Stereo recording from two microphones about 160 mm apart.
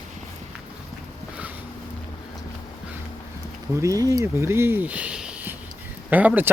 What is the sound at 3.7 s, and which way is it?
Speech, 20° right (ahead or behind).